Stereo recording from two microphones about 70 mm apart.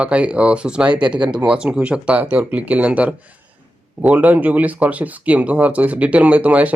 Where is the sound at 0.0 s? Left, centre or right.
Centre.